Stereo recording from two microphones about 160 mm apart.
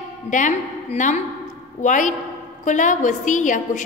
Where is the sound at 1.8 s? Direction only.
50° left (ahead or behind).